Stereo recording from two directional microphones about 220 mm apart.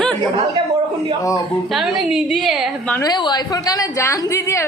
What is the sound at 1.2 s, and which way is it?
Speech, 15° left (ahead or behind).